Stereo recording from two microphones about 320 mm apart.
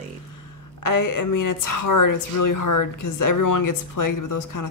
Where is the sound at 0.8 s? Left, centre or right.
Left.